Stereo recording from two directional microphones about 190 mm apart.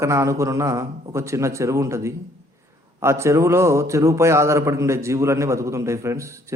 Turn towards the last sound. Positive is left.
turn(degrees=-15)  # may be behind; listen again after turning